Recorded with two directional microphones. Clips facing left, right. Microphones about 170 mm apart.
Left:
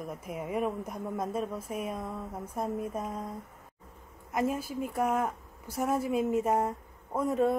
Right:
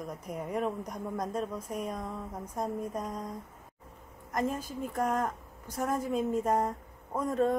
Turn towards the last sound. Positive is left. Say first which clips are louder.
# left 1 dB
turn(degrees=5)  # may be behind; listen again after turning